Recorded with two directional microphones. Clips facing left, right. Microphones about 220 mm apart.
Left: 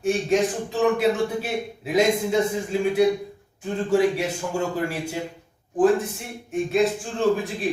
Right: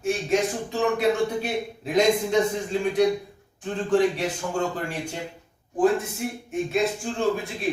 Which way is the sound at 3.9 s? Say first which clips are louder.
Left 1 dB; 10° left (ahead or behind).